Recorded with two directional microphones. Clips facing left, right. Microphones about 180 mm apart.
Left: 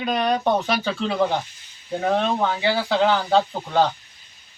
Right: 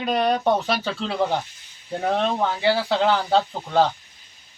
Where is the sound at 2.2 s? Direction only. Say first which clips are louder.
Left 1 dB; centre (ahead or behind).